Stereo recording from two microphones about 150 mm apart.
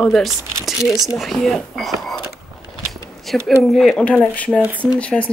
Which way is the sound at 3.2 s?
Centre (ahead or behind).